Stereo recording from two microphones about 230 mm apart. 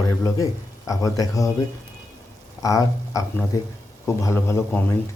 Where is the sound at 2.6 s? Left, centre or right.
Centre.